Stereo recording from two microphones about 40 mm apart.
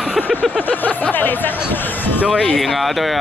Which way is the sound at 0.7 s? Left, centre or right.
Left.